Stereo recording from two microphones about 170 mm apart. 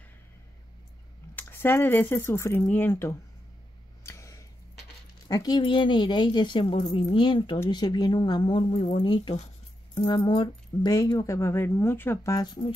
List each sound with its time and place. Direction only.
1.3 s speech: 10° left (ahead or behind)
4.0 s a sound: 15° left (ahead or behind)
5.3 s speech: 25° left (ahead or behind)